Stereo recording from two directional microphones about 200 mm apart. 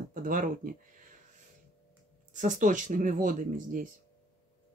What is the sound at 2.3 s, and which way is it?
Speech, 40° right (ahead or behind).